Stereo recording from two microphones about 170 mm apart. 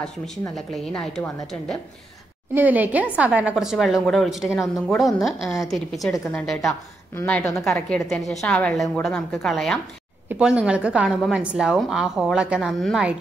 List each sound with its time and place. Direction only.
0.6 s speech: 5° left (ahead or behind)
2.5 s a woman's voice: 10° right (ahead or behind)